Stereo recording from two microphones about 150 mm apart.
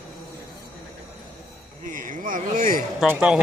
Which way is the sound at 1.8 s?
60° right (ahead or behind).